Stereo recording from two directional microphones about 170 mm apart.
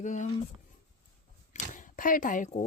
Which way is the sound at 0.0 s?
45° left (ahead or behind).